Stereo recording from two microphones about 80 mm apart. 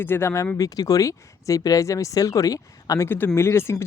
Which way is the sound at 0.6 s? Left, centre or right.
Left.